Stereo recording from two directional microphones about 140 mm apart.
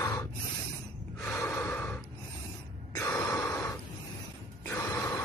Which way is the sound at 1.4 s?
20° left (ahead or behind).